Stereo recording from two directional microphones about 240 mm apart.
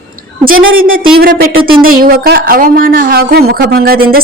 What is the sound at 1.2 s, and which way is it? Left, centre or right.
Speech, right.